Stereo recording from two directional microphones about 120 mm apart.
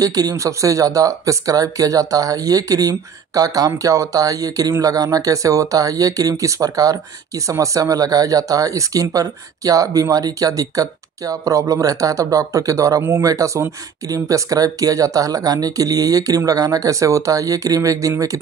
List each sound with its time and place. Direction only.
0.0 s speech: 30° right (ahead or behind)